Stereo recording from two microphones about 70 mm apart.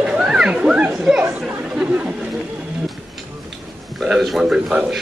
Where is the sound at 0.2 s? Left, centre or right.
Centre.